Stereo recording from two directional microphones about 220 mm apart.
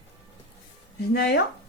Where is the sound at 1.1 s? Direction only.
45° left (ahead or behind).